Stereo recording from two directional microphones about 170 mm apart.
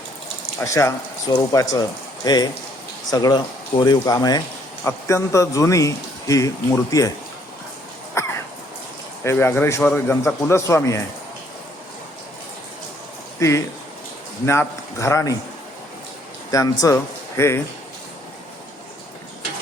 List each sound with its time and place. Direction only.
0.6 s speech: 20° left (ahead or behind)
8.2 s a sound: 15° left (ahead or behind)
9.2 s speech: 15° left (ahead or behind)
13.4 s speech: 15° left (ahead or behind)
16.5 s speech: 20° left (ahead or behind)